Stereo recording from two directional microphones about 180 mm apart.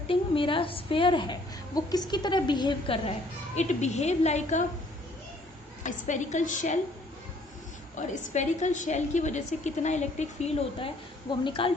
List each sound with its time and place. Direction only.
0.1 s a woman's voice: 30° left (ahead or behind)
5.8 s a woman's voice: 45° left (ahead or behind)
7.9 s a woman's voice: 45° left (ahead or behind); by 11.7 s 25° left (ahead or behind)